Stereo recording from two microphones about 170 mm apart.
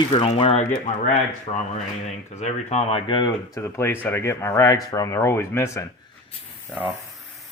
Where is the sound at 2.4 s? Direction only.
40° left (ahead or behind).